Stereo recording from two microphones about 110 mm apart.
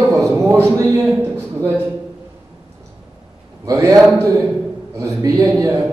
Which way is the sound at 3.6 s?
30° right (ahead or behind).